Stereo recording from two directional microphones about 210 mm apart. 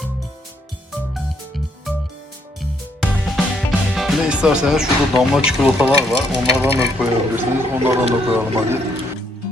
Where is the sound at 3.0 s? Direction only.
Centre (ahead or behind).